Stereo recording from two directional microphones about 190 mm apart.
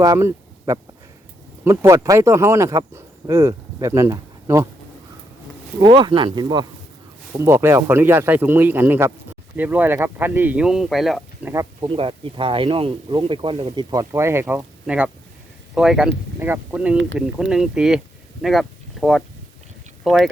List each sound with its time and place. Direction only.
0.0 s speech: 15° right (ahead or behind)
5.8 s speech: 25° right (ahead or behind); by 11.5 s centre (ahead or behind)
11.5 s speech: 25° right (ahead or behind); by 20.3 s centre (ahead or behind)